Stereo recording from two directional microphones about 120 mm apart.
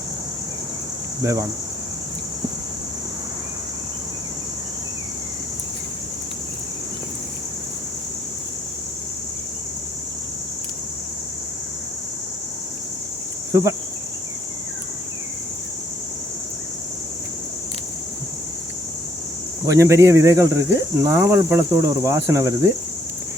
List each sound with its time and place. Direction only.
1.2 s speech: 30° right (ahead or behind)
13.5 s cricket: 25° right (ahead or behind)
19.6 s speech: 25° right (ahead or behind)